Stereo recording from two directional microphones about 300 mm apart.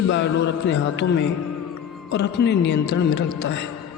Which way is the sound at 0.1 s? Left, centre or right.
Left.